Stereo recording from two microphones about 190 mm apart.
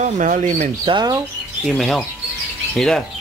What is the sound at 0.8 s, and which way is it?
Speech, 25° right (ahead or behind).